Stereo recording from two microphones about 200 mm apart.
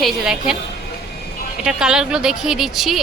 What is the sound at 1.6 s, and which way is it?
Speech, 5° right (ahead or behind).